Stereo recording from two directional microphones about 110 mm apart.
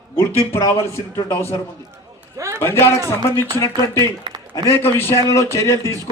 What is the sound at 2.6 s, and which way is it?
A man's voice, 25° left (ahead or behind).